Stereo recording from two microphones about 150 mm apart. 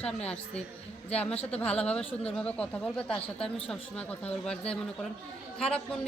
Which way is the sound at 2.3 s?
5° left (ahead or behind).